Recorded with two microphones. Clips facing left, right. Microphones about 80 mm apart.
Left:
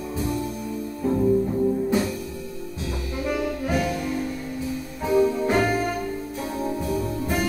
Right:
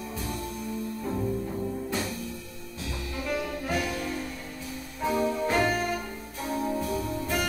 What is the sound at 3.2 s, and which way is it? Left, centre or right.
Brass instrument, centre.